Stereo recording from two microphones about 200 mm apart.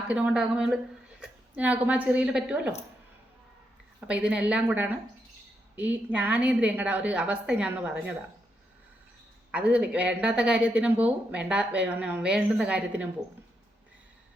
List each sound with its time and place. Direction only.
0.1 s a woman's voice: 5° right (ahead or behind)
4.0 s a woman's voice: 5° right (ahead or behind)
9.5 s a woman's voice: 5° right (ahead or behind)